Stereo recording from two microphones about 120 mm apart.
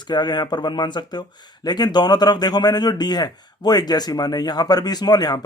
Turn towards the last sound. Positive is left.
turn(degrees=35)  # may be behind; listen again after turning